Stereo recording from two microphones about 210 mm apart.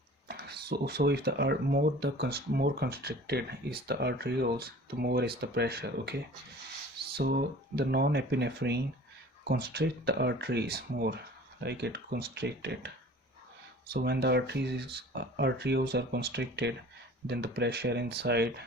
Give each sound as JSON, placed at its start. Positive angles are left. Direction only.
{"t": 0.3, "sound": "speech", "side_deg": -50}
{"t": 7.2, "sound": "speech", "side_deg": -50}
{"t": 13.9, "sound": "speech", "side_deg": -50}